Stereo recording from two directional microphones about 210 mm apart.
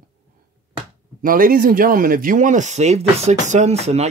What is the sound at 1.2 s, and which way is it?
Speech, 40° right (ahead or behind).